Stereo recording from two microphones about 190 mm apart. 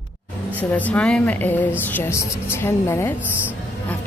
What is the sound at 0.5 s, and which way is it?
A man's voice, 10° left (ahead or behind).